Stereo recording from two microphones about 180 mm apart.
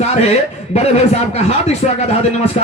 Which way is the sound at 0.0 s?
35° left (ahead or behind).